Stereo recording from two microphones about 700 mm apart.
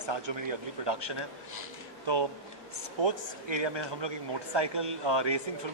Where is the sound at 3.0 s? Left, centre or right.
Right.